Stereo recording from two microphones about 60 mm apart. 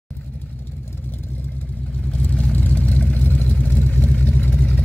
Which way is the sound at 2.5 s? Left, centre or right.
Left.